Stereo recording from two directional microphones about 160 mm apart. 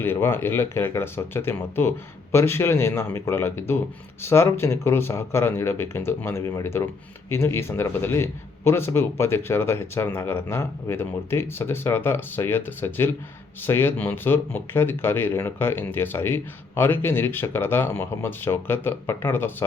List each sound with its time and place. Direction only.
0.0 s speech: 15° left (ahead or behind)